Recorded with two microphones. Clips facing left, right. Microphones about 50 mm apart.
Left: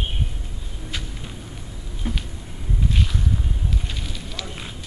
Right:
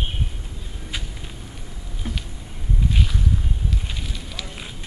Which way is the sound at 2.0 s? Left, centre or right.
Centre.